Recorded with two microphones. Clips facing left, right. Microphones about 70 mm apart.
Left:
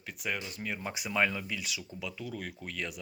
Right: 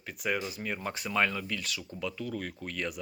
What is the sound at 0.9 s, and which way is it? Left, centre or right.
Speech, centre.